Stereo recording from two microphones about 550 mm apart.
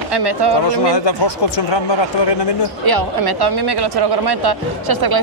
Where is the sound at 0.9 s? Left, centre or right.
Left.